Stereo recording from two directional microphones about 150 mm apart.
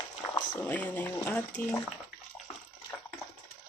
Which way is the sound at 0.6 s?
10° left (ahead or behind).